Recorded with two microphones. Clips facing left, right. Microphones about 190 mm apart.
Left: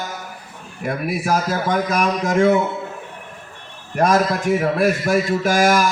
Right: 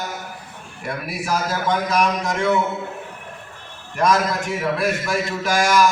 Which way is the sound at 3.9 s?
55° left (ahead or behind).